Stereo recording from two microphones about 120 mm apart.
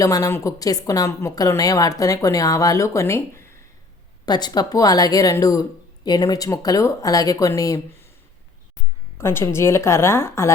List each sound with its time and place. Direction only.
0.0 s a woman's voice: 30° left (ahead or behind)
4.3 s a woman's voice: 35° left (ahead or behind)
9.1 s a woman's voice: 20° left (ahead or behind)